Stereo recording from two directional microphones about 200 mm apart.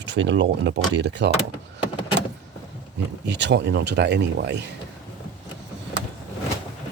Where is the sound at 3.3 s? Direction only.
60° right (ahead or behind).